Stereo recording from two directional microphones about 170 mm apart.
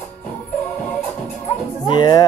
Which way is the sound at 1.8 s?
25° left (ahead or behind).